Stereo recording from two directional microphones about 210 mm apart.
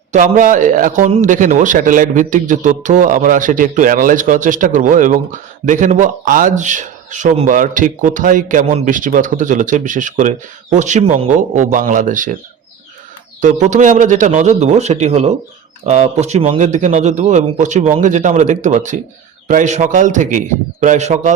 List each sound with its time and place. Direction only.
0.1 s a man's voice: 35° right (ahead or behind)
13.4 s a man's voice: 35° right (ahead or behind)